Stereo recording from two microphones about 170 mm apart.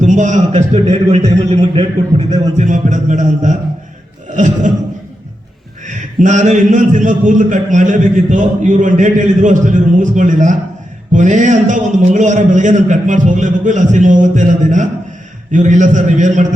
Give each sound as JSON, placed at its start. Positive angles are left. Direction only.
{"t": 0.0, "sound": "a man's voice", "side_deg": -45}
{"t": 5.8, "sound": "a man's voice", "side_deg": -50}